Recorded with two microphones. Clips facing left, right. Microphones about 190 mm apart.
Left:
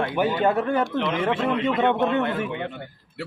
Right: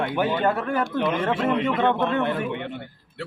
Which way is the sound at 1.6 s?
20° left (ahead or behind).